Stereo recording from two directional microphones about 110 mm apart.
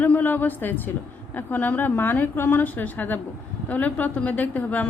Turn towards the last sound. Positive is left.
turn(degrees=15)  # may be behind; listen again after turning